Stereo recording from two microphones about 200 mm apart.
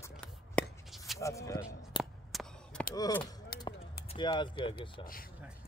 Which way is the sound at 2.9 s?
20° left (ahead or behind).